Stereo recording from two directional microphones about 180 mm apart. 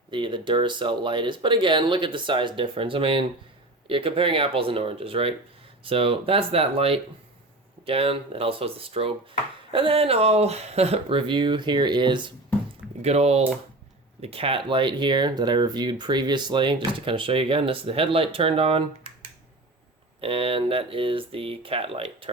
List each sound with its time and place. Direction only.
0.1 s speech: 25° right (ahead or behind)
13.0 s speech: 35° right (ahead or behind)
20.2 s speech: 30° right (ahead or behind)